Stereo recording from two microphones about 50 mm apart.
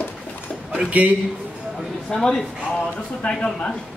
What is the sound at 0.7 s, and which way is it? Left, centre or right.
Speech, right.